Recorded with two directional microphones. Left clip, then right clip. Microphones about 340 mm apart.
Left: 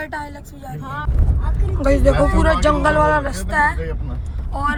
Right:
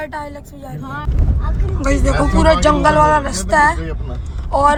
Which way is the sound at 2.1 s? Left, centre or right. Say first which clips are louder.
Left 2 dB; centre.